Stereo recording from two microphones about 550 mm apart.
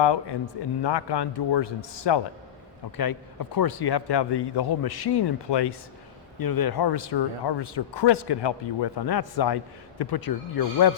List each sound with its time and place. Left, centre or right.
0.0 s speech: left